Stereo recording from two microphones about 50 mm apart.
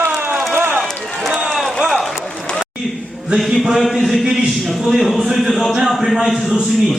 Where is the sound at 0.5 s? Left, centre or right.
Right.